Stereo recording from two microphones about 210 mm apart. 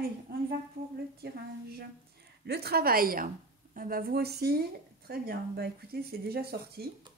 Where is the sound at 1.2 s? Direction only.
50° right (ahead or behind).